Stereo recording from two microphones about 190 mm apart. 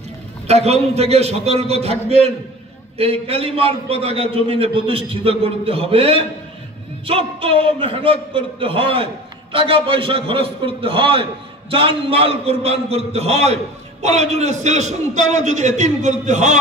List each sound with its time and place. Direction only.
0.5 s a man's voice: 35° right (ahead or behind)